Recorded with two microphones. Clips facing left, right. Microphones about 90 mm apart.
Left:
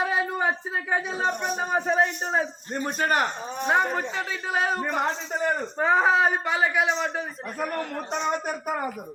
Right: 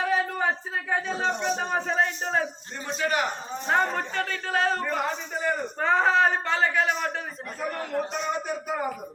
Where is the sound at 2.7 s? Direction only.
45° left (ahead or behind).